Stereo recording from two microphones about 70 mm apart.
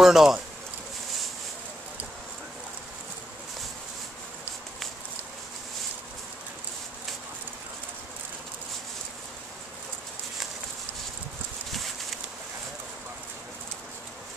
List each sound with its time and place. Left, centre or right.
0.0 s speech: centre